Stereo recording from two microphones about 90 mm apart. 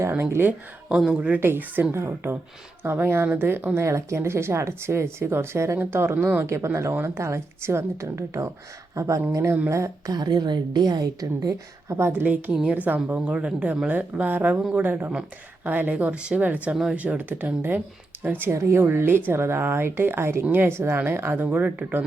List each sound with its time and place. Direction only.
0.0 s a woman's voice: 25° right (ahead or behind)
0.9 s a woman's voice: 10° right (ahead or behind)
1.4 s a woman's voice: 25° right (ahead or behind)
6.4 s speech: 35° right (ahead or behind)
10.2 s a woman's voice: 50° right (ahead or behind); by 12.2 s 30° right (ahead or behind)
12.2 s a woman's voice: 15° right (ahead or behind)